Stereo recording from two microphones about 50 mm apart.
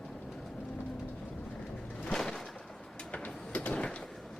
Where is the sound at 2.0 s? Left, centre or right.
Centre.